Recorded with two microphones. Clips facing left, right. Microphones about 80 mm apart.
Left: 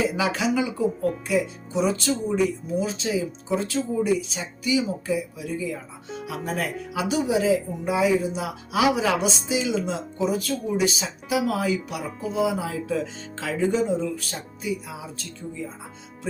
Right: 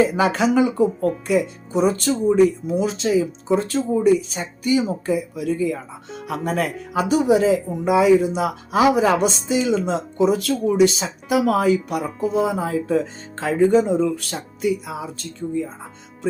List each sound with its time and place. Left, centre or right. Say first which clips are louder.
0.3 s speech: right 6 dB; right
2.6 s speech: right 5 dB; right
8.4 s speech: right 6 dB; right
9.1 s speech: right 5 dB; right
9.8 s speech: right 7 dB; right
11.0 s speech: right 5 dB; right
13.7 s speech: right 5 dB; right